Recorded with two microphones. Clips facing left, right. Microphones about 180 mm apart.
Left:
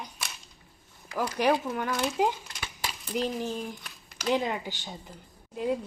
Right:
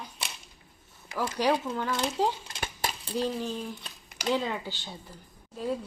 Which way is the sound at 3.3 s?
15° left (ahead or behind).